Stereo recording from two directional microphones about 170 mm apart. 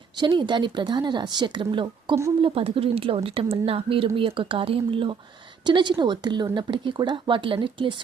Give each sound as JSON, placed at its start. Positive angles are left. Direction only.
{"t": 0.2, "sound": "a woman's voice", "side_deg": -25}